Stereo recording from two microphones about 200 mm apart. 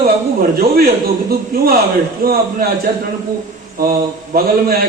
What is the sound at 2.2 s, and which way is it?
Speech, 45° right (ahead or behind).